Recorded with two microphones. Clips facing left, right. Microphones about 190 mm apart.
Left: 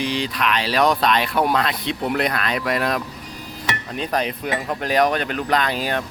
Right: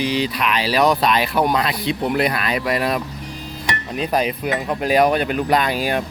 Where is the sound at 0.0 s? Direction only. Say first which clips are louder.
Right 2 dB; 5° right (ahead or behind).